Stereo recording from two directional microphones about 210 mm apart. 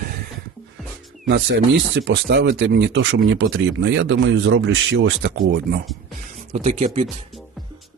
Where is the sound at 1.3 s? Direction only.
60° right (ahead or behind).